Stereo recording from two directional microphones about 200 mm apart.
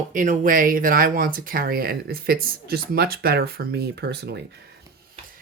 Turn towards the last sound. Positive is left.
turn(degrees=-55)  # may be behind; listen again after turning